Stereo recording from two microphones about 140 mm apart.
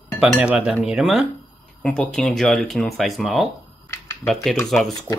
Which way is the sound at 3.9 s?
20° left (ahead or behind).